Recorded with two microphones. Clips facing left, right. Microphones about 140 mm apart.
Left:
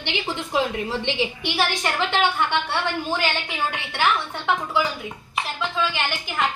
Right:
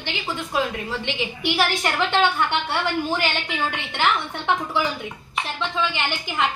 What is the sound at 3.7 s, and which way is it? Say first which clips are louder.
Speech: left 1 dB; 20° right (ahead or behind).